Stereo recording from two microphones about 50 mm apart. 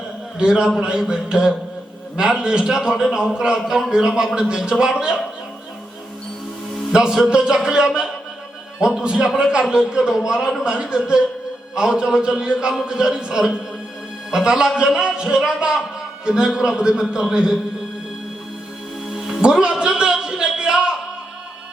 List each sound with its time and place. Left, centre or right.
0.3 s a man's voice: centre
6.9 s a man's voice: centre
19.0 s music: centre